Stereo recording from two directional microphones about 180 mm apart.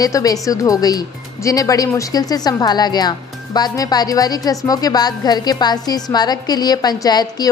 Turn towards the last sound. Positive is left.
turn(degrees=20)  # may be behind; listen again after turning